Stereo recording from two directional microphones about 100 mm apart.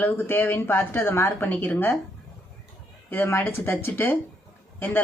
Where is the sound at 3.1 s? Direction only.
20° left (ahead or behind).